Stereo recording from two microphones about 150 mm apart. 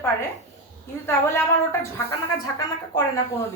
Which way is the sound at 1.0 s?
15° left (ahead or behind).